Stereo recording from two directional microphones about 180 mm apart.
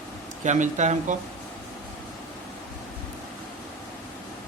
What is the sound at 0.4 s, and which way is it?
Speech, 40° right (ahead or behind).